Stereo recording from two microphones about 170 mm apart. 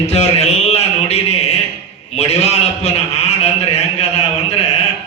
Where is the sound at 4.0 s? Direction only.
40° left (ahead or behind).